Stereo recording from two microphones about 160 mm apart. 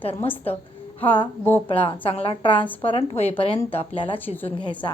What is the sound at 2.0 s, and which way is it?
Speech, 35° left (ahead or behind).